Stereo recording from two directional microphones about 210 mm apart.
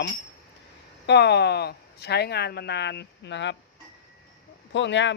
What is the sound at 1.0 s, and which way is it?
Speech, 55° left (ahead or behind).